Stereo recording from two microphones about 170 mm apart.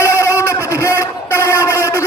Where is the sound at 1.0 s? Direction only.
15° left (ahead or behind).